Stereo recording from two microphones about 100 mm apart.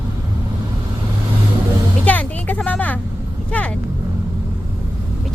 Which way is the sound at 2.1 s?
15° left (ahead or behind).